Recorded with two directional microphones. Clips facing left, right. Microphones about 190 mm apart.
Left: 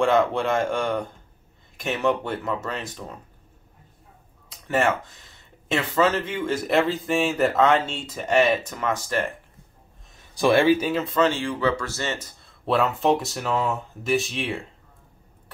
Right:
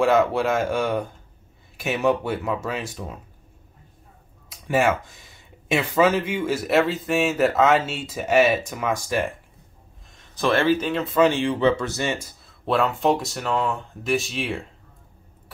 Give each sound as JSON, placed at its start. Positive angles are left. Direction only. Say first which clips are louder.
{"t": 0.0, "sound": "speech", "louder": "right 1 dB", "side_deg": -5}
{"t": 4.5, "sound": "speech", "louder": "right 2 dB", "side_deg": -10}
{"t": 10.1, "sound": "speech", "louder": "left 3 dB", "side_deg": 10}
{"t": 11.1, "sound": "speech", "louder": "right 5 dB", "side_deg": -15}